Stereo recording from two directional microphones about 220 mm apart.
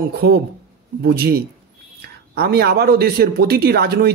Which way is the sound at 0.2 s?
45° right (ahead or behind).